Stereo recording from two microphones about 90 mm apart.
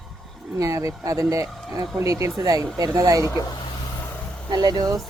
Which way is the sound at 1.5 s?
5° left (ahead or behind).